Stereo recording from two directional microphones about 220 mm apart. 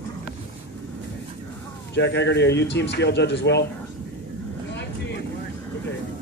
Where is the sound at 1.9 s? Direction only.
50° left (ahead or behind).